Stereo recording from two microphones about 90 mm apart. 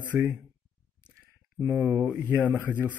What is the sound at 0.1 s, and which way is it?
Speech, 20° right (ahead or behind).